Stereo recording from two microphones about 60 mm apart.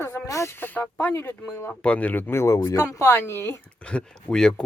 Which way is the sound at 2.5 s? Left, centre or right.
Left.